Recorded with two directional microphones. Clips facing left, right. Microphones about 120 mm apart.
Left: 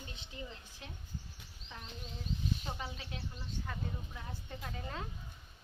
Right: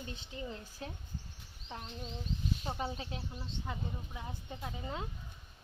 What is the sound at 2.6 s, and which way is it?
Speech, 30° right (ahead or behind).